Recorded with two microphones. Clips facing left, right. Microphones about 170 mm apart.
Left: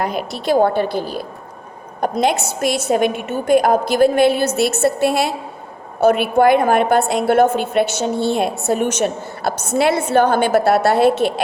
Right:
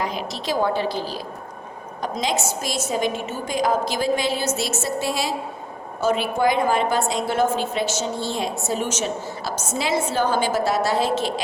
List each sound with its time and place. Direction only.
0.0 s a woman's voice: 55° left (ahead or behind)